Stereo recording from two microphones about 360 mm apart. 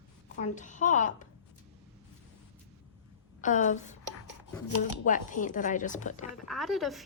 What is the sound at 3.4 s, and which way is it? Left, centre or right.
Speech, left.